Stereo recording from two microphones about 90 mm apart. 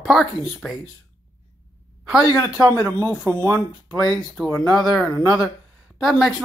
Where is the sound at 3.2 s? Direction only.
35° right (ahead or behind).